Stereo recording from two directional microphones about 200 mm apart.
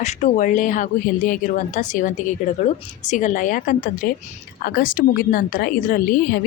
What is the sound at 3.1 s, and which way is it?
A woman's voice, 40° left (ahead or behind).